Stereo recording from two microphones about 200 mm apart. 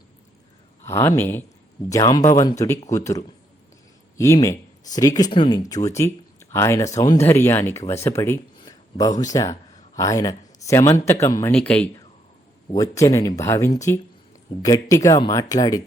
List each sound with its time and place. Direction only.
0.9 s speech: 15° left (ahead or behind)
12.7 s speech: 15° left (ahead or behind)